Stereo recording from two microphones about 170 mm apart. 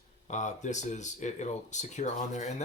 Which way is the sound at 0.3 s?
45° left (ahead or behind).